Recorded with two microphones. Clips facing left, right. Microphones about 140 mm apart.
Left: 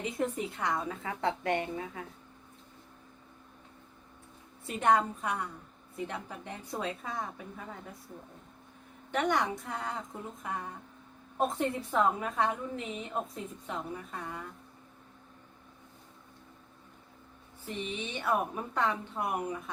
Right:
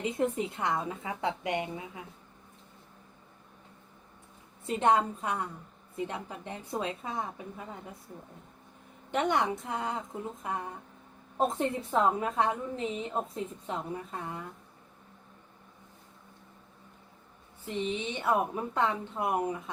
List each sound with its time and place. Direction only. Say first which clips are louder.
0.0 s a woman's voice: right 3 dB; 20° right (ahead or behind)
4.6 s a woman's voice: right 1 dB; 25° right (ahead or behind)
9.1 s a woman's voice: right 1 dB; 25° right (ahead or behind)
11.3 s a woman's voice: right 1 dB; 25° right (ahead or behind)
17.7 s a woman's voice: right 4 dB; 25° right (ahead or behind)